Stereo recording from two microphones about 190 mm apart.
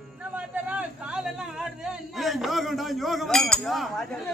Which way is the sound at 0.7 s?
5° right (ahead or behind).